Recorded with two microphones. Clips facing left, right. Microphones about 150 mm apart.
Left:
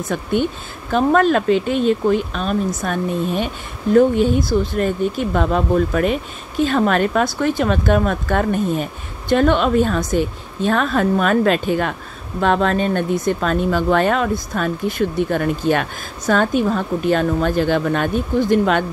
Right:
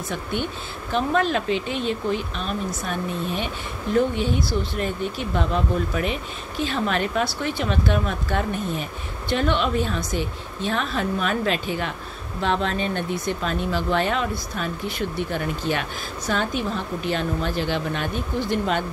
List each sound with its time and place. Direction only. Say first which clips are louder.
0.9 s speech: left 7 dB; 50° left (ahead or behind)